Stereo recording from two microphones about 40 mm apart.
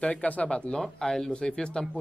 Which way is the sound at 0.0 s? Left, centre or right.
Left.